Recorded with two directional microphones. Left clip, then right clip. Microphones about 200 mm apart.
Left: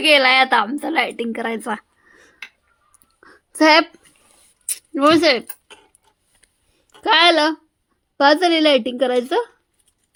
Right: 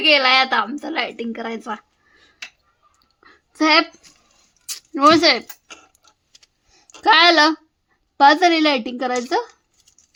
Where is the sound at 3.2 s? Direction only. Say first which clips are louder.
Left 4 dB; 15° left (ahead or behind).